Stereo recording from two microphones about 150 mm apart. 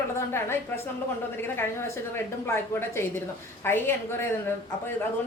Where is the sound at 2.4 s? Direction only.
15° left (ahead or behind).